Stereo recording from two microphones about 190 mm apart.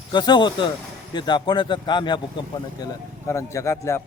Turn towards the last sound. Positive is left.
turn(degrees=15)  # may be behind; listen again after turning